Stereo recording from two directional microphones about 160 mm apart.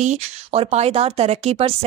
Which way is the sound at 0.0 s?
45° right (ahead or behind).